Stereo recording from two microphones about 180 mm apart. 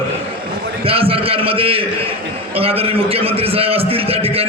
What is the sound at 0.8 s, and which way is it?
A man's voice, 30° right (ahead or behind).